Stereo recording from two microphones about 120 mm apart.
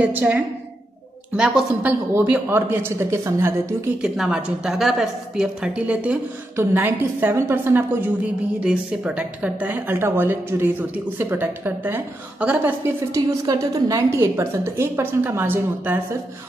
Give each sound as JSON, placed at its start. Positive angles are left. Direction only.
{"t": 0.0, "sound": "a woman's voice", "side_deg": -10}
{"t": 4.0, "sound": "a woman's voice", "side_deg": -5}
{"t": 13.1, "sound": "a woman's voice", "side_deg": -25}